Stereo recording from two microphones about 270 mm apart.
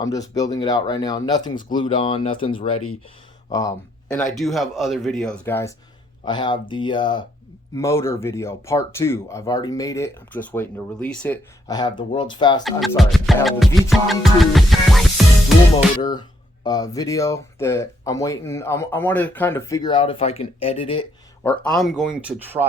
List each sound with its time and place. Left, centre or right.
0.0 s speech: centre
11.7 s speech: centre
12.6 s speech: centre
13.9 s music: centre
16.0 s speech: centre
21.4 s speech: centre